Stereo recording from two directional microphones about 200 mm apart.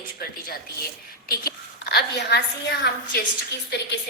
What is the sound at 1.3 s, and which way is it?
A woman's voice, 50° left (ahead or behind).